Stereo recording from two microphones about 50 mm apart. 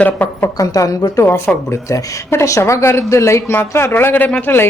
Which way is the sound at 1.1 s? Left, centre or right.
Left.